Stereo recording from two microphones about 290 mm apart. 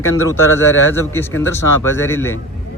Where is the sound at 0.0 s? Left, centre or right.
Left.